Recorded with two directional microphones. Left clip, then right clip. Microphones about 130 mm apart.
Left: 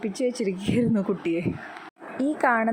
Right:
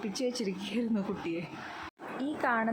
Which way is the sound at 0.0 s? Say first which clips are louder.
Left 7 dB; 25° left (ahead or behind).